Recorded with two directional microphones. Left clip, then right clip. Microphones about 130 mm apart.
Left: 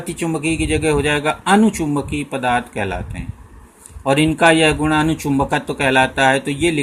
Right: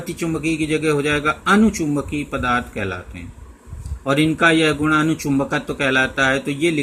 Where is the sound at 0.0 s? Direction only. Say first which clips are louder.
Left 2 dB; 25° left (ahead or behind).